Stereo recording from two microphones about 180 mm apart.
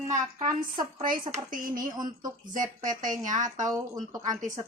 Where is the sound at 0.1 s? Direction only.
40° right (ahead or behind).